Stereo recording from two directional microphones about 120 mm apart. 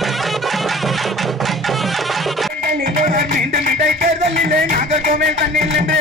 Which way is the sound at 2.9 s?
90° right.